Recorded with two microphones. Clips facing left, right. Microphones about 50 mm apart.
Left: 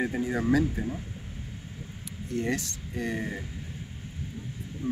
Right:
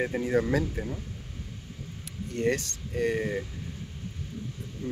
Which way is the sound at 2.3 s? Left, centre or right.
Right.